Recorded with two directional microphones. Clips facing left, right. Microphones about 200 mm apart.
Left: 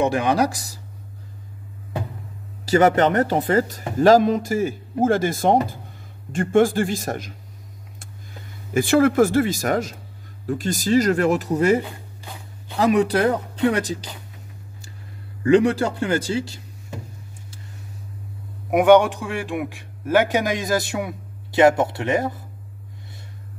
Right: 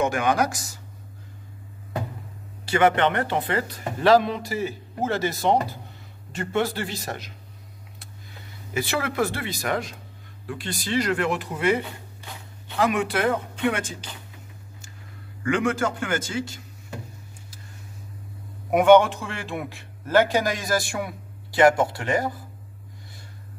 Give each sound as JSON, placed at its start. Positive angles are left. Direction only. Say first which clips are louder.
{"t": 0.0, "sound": "speech", "louder": "left 3 dB", "side_deg": 35}
{"t": 2.6, "sound": "speech", "louder": "left 4 dB", "side_deg": 40}
{"t": 8.7, "sound": "speech", "louder": "left 10 dB", "side_deg": 45}
{"t": 15.4, "sound": "speech", "louder": "left 7 dB", "side_deg": 35}
{"t": 18.7, "sound": "speech", "louder": "left 1 dB", "side_deg": 15}